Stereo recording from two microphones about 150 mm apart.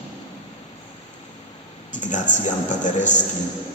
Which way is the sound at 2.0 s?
55° left (ahead or behind).